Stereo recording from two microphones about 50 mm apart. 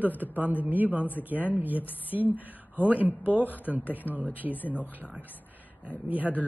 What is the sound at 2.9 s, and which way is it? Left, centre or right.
Speech, left.